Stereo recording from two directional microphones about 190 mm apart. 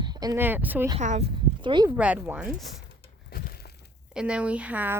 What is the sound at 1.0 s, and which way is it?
Speech, 40° right (ahead or behind).